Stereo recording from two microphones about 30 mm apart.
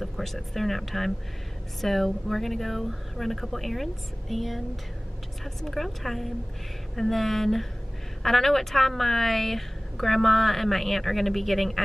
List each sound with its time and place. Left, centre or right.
0.0 s a woman's voice: centre